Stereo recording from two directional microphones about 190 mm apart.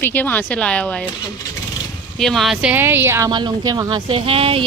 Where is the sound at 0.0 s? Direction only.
10° left (ahead or behind).